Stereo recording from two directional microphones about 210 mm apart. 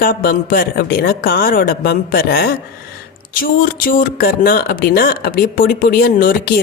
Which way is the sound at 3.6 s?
40° left (ahead or behind).